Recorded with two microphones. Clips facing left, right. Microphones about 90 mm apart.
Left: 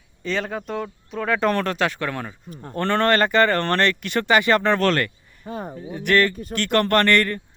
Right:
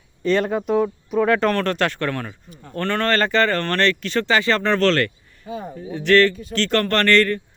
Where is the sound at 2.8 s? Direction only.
25° left (ahead or behind).